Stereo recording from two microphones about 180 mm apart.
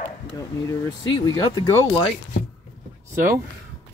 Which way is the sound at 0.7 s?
25° left (ahead or behind).